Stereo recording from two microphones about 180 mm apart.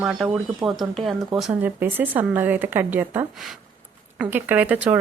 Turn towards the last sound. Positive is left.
turn(degrees=-10)  # may be behind; listen again after turning